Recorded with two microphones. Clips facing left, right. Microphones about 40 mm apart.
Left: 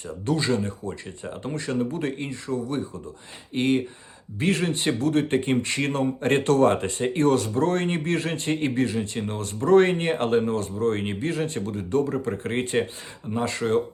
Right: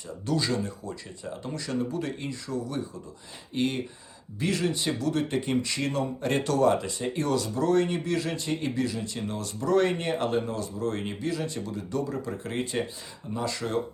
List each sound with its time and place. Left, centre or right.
0.3 s speech: left